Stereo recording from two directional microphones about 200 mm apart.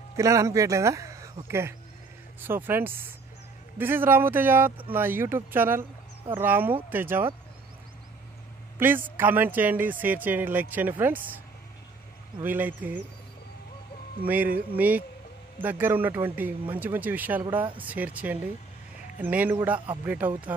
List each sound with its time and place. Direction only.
0.1 s speech: 15° right (ahead or behind)
8.7 s speech: 10° right (ahead or behind)
12.4 s speech: 10° right (ahead or behind)
14.2 s speech: 10° right (ahead or behind)